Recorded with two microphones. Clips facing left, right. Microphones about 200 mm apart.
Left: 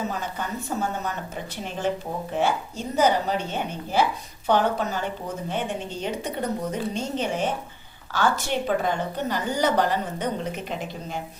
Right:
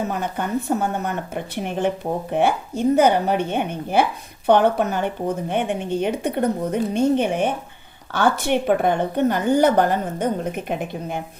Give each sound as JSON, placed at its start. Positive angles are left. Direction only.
{"t": 0.1, "sound": "a woman's voice", "side_deg": -55}